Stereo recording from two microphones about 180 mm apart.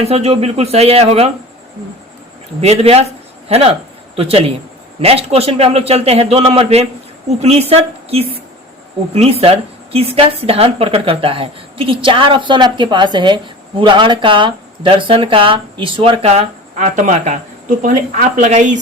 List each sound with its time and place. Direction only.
0.0 s a woman's voice: 35° right (ahead or behind)
2.6 s a woman's voice: 35° right (ahead or behind)